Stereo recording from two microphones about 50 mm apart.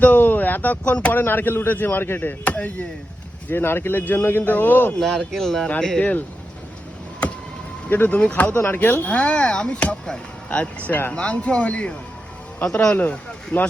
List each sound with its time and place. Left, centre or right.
0.0 s a sound: left
1.1 s a man's voice: left
2.4 s speech: left
3.5 s speech: left
4.9 s speech: centre
6.0 s speech: left
7.9 s speech: left
8.2 s speech: left
8.5 s a man's voice: left
8.8 s speech: left
9.1 s speech: left
13.0 s speech: left